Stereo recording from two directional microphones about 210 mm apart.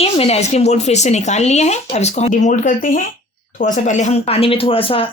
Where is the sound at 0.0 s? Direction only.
30° left (ahead or behind).